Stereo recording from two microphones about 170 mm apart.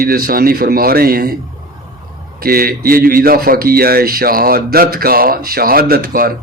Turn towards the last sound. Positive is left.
turn(degrees=-60)  # may be behind; listen again after turning